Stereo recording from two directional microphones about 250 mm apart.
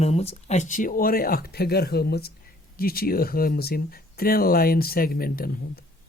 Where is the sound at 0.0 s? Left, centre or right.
Left.